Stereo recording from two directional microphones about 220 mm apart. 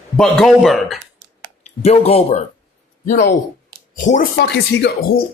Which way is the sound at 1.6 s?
30° left (ahead or behind).